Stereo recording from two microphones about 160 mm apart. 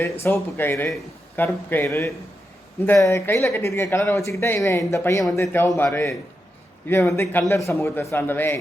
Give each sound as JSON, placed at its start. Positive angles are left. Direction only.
{"t": 0.0, "sound": "speech", "side_deg": 15}